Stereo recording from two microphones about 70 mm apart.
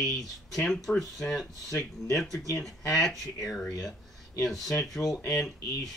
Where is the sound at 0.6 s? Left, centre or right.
Centre.